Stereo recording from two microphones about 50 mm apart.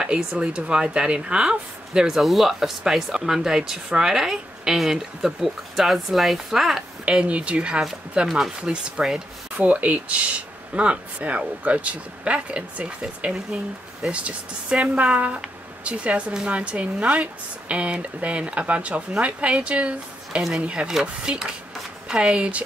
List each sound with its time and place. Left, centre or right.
0.0 s speech: centre
7.1 s speech: right
9.6 s speech: right